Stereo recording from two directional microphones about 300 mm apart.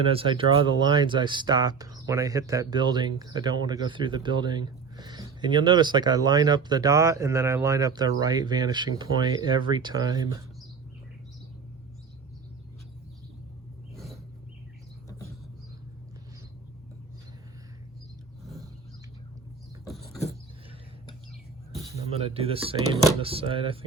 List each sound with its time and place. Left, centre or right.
0.1 s speech: centre
13.9 s a sound: centre
22.1 s speech: centre